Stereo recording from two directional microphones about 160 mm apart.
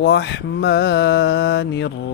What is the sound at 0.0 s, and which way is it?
Mantra, 90° left.